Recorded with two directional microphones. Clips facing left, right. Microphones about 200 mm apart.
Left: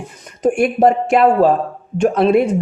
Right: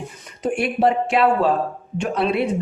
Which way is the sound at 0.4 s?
45° left (ahead or behind).